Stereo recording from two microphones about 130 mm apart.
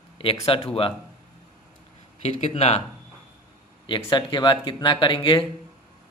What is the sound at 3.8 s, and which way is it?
Speech, 35° left (ahead or behind).